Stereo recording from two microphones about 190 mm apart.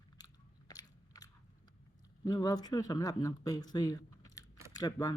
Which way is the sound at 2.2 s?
20° left (ahead or behind).